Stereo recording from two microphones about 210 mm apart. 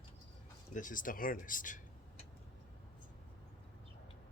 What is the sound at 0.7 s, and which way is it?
Speech, 40° left (ahead or behind).